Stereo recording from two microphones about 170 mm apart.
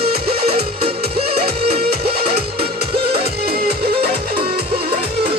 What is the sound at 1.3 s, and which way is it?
Music, 35° right (ahead or behind).